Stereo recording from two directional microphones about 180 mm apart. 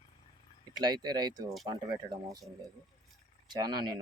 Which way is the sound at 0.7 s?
25° right (ahead or behind).